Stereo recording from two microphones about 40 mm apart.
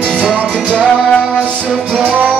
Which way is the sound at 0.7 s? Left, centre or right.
Left.